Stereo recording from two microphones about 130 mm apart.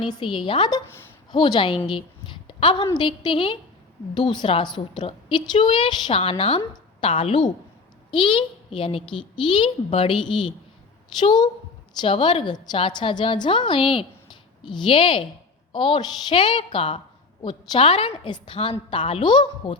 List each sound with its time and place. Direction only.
0.0 s a woman's voice: 40° left (ahead or behind)